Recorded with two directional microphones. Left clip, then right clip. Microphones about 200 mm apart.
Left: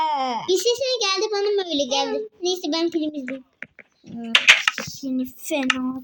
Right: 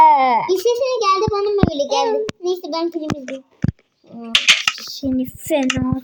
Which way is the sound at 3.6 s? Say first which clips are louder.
Right 9 dB; centre (ahead or behind).